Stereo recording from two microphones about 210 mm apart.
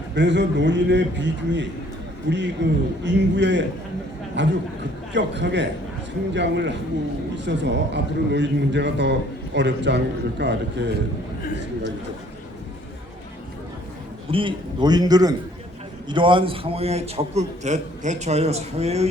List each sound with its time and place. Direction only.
0.1 s a man's voice: 55° right (ahead or behind)
14.3 s a man's voice: 25° right (ahead or behind)